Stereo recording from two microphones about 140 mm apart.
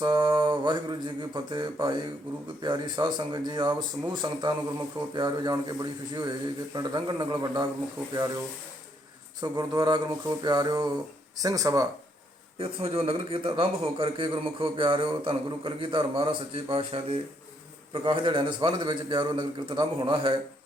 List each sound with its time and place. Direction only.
0.0 s a man's voice: 30° right (ahead or behind)
9.4 s speech: 30° right (ahead or behind)
12.5 s a man's voice: 40° right (ahead or behind)